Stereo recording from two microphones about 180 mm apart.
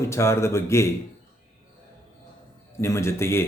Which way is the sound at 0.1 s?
15° left (ahead or behind).